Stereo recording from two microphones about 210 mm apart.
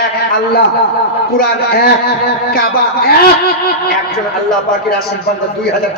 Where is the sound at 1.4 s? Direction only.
45° left (ahead or behind).